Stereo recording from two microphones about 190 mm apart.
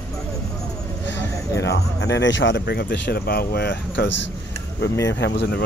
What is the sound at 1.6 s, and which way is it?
Speech, 65° left (ahead or behind).